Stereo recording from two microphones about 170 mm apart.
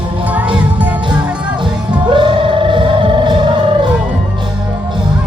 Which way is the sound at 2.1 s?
30° right (ahead or behind).